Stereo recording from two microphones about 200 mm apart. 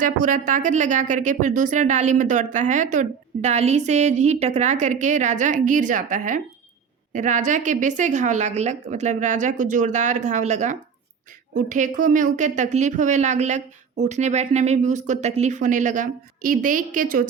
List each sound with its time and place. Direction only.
0.0 s speech: 40° right (ahead or behind)